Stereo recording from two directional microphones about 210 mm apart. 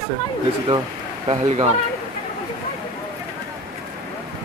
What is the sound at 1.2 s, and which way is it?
Speech, 25° right (ahead or behind).